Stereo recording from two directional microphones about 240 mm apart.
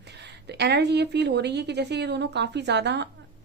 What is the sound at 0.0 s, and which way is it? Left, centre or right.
A woman's voice, right.